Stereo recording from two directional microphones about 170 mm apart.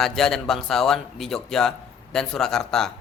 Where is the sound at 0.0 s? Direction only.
Centre (ahead or behind).